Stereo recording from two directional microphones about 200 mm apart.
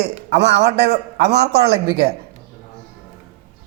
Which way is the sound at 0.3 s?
60° right (ahead or behind).